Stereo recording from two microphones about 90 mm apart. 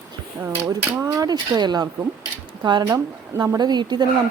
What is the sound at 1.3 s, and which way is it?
Speech, 50° right (ahead or behind).